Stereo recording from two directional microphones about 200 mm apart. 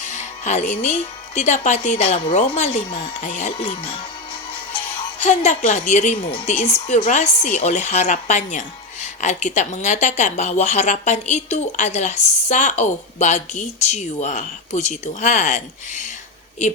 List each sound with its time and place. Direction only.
0.0 s a woman's voice: 35° left (ahead or behind)
5.2 s a woman's voice: 35° left (ahead or behind)